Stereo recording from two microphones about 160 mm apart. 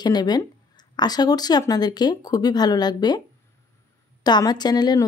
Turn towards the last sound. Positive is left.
turn(degrees=25)  # may be behind; listen again after turning